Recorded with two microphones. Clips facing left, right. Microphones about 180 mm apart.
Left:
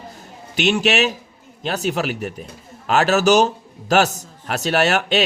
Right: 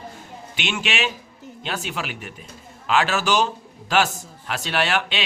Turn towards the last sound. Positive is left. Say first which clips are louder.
# left 6 dB
turn(degrees=45)  # may be behind; listen again after turning